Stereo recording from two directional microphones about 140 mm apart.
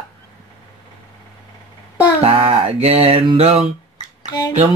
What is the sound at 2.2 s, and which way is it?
Music, 45° right (ahead or behind).